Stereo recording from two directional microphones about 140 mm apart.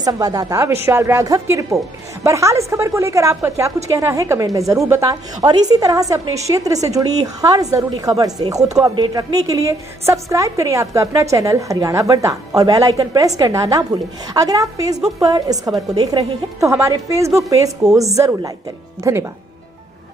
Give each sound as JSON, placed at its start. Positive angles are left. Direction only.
{"t": 0.0, "sound": "a woman's voice", "side_deg": -25}